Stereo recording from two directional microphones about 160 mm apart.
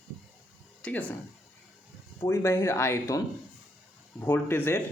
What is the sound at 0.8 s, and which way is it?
Speech, 10° left (ahead or behind).